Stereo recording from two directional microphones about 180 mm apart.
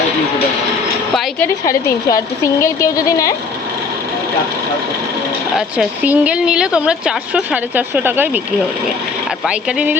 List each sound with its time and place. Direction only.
1.6 s speech: 20° left (ahead or behind)
5.5 s speech: 5° right (ahead or behind)
9.5 s speech: 5° right (ahead or behind)